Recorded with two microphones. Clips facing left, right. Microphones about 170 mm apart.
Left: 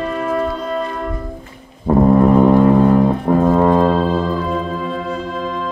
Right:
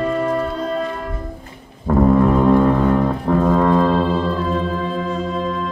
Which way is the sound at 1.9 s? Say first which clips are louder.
Left 3 dB; 20° left (ahead or behind).